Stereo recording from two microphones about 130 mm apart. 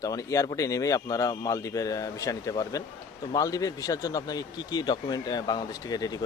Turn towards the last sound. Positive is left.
turn(degrees=30)  # may be behind; listen again after turning